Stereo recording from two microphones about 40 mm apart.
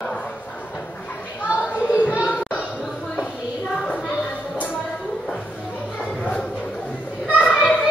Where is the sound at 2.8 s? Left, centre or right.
Centre.